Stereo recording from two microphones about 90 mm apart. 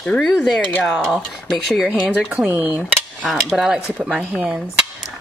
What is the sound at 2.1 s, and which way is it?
Speech, 15° right (ahead or behind).